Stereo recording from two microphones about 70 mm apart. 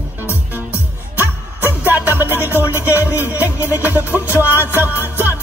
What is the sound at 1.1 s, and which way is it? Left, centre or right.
Music, right.